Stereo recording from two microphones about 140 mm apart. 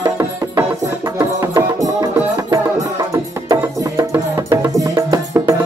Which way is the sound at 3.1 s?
20° right (ahead or behind).